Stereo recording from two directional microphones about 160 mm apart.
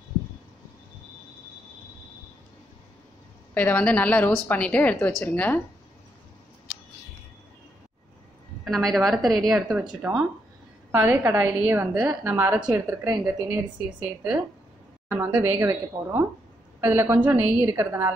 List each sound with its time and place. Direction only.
3.5 s a woman's voice: 10° left (ahead or behind)
8.6 s a woman's voice: centre (ahead or behind)
10.9 s a woman's voice: 15° right (ahead or behind)
13.5 s a woman's voice: 10° right (ahead or behind)